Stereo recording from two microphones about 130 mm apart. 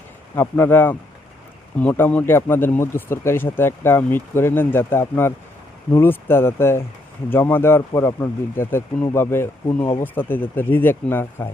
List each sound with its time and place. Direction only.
0.3 s speech: 15° left (ahead or behind)